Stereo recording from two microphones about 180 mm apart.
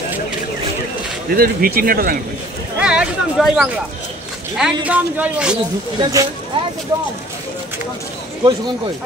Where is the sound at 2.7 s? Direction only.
5° right (ahead or behind).